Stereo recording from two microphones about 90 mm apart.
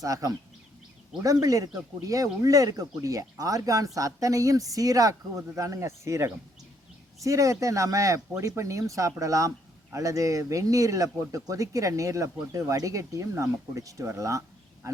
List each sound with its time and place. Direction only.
0.0 s speech: 40° right (ahead or behind)